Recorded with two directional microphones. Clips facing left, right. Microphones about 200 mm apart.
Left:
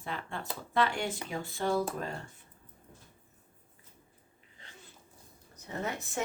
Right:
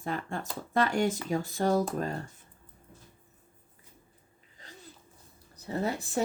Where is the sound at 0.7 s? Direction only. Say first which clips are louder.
Right 4 dB; 45° right (ahead or behind).